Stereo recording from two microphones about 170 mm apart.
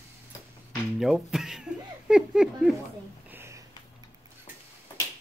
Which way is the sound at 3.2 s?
15° right (ahead or behind).